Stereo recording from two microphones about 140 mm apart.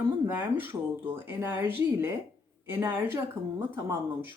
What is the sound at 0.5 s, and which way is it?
Speech, 15° right (ahead or behind).